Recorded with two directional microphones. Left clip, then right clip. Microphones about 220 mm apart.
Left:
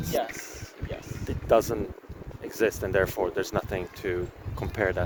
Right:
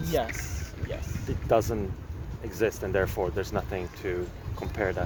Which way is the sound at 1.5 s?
55° left (ahead or behind).